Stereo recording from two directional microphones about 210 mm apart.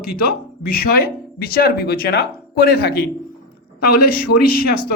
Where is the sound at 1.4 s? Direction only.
45° left (ahead or behind).